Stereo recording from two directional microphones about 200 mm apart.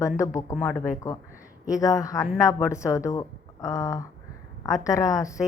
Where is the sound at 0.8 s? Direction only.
15° left (ahead or behind).